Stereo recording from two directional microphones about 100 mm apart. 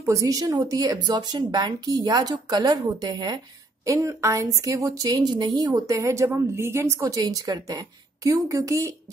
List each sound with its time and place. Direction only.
0.0 s a woman's voice: 35° right (ahead or behind)
3.8 s a woman's voice: 30° right (ahead or behind)
7.1 s a woman's voice: 35° right (ahead or behind)